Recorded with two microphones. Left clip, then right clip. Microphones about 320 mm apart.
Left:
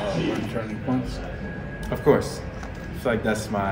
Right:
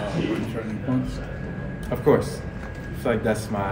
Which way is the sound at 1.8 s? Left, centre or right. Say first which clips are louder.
Even; centre.